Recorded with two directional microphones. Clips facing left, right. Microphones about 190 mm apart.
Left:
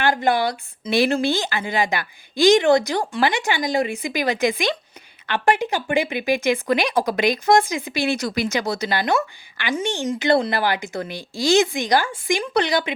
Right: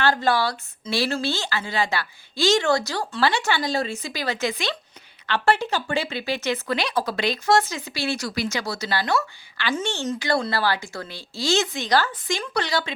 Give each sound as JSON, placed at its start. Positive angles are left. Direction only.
{"t": 0.0, "sound": "speech", "side_deg": 15}